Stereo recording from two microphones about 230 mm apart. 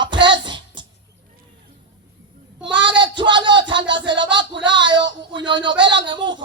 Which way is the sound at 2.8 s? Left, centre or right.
Centre.